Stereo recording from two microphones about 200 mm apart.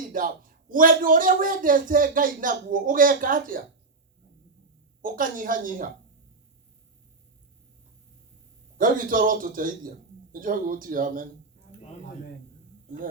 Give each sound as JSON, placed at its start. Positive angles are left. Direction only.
{"t": 0.1, "sound": "speech", "side_deg": -45}
{"t": 5.0, "sound": "speech", "side_deg": -45}
{"t": 8.8, "sound": "speech", "side_deg": -45}